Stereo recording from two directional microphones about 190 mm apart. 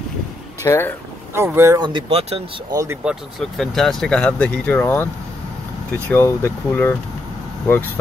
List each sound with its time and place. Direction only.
0.7 s speech: 15° left (ahead or behind)
1.3 s speech: 15° right (ahead or behind); by 2.4 s 30° right (ahead or behind)
2.7 s speech: 15° right (ahead or behind)
3.0 s speech: centre (ahead or behind)